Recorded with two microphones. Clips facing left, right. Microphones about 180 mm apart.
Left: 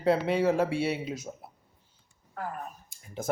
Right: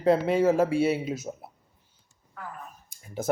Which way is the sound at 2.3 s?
45° left (ahead or behind).